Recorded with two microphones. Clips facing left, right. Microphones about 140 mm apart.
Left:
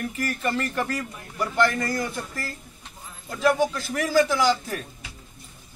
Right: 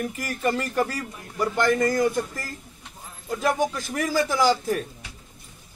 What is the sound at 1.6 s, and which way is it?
A man's voice, 20° right (ahead or behind).